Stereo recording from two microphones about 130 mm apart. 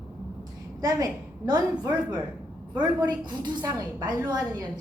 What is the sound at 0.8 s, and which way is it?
A woman's voice, 25° right (ahead or behind).